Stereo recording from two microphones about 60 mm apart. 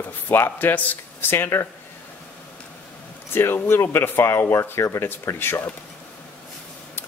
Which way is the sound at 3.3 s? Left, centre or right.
Left.